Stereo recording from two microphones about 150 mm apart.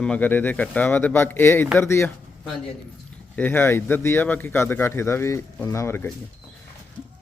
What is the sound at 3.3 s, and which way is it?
A man's voice, 10° left (ahead or behind).